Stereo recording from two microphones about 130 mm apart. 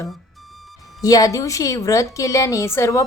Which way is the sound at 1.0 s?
25° left (ahead or behind).